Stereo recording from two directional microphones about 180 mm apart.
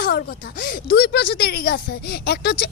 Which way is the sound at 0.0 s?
55° left (ahead or behind).